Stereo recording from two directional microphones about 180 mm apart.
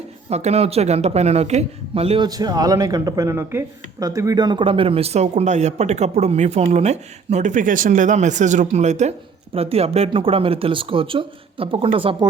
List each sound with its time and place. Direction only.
0.3 s speech: 35° right (ahead or behind)